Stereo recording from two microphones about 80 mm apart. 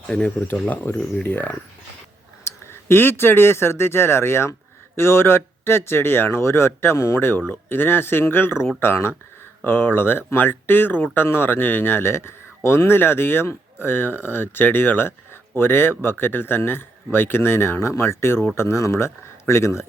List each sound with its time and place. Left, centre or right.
0.1 s speech: centre; by 19.8 s left